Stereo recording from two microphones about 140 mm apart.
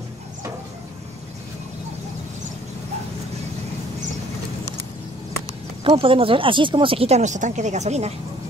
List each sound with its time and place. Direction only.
5.9 s speech: 40° right (ahead or behind)